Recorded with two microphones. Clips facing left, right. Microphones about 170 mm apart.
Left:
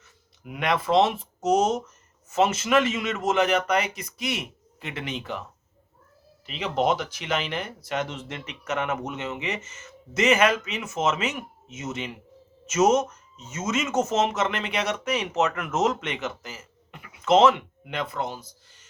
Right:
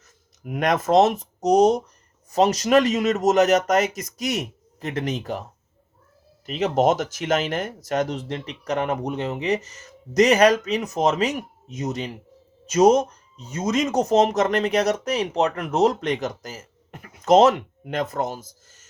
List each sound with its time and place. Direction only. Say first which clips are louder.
0.0 s speech: right 5 dB; 45° right (ahead or behind)